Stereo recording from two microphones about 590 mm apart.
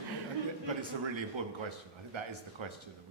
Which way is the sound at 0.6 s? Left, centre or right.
Right.